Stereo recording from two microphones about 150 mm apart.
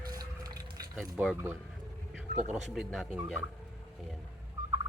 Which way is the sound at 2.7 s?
Centre (ahead or behind).